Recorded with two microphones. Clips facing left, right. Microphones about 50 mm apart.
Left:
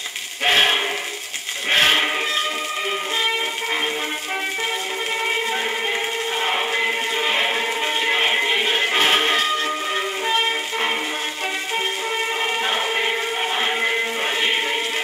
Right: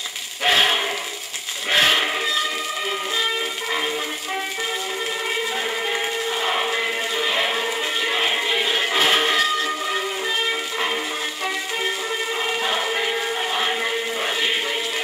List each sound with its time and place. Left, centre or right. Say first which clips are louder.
0.4 s a sound: left 1 dB; left
1.7 s sheep: left 1 dB; left
6.7 s music: left 2 dB; left
12.6 s music: left 1 dB; left